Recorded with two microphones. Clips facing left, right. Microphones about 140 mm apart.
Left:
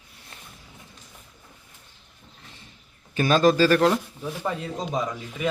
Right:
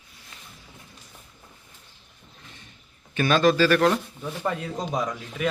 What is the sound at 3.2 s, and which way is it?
Speech, 35° left (ahead or behind).